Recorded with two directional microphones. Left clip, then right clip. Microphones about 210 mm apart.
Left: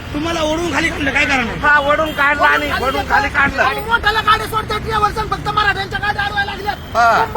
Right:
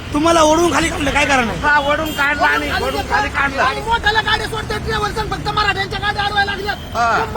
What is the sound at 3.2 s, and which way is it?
Speech, 30° left (ahead or behind).